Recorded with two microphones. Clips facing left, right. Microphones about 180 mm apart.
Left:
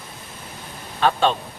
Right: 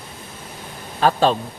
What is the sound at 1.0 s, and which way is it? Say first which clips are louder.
Speech: right 2 dB; 35° right (ahead or behind).